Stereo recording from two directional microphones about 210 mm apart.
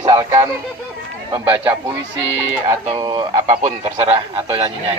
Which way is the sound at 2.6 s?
20° right (ahead or behind).